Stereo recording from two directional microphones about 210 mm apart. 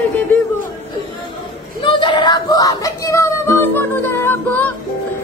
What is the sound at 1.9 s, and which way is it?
Music, 25° left (ahead or behind).